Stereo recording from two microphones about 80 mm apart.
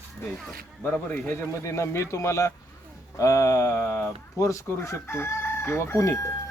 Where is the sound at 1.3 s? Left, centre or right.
Left.